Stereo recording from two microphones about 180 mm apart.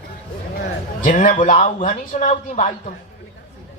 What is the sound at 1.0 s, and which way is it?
A man's voice, 45° left (ahead or behind).